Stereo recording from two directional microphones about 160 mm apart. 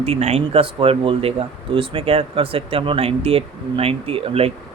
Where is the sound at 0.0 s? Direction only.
40° right (ahead or behind).